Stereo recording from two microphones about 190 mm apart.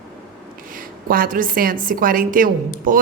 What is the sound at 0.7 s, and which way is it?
A woman's voice, 45° right (ahead or behind).